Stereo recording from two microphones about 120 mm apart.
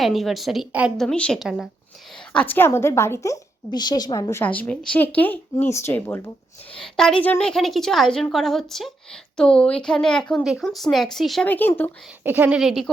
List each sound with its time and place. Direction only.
0.0 s a woman's voice: centre (ahead or behind)
0.9 s a woman's voice: 5° left (ahead or behind)
2.3 s a woman's voice: 15° left (ahead or behind)
4.4 s a woman's voice: 10° left (ahead or behind)
6.7 s a woman's voice: 5° left (ahead or behind)
11.4 s speech: 15° left (ahead or behind)
12.2 s speech: 15° right (ahead or behind)
12.5 s a woman's voice: centre (ahead or behind)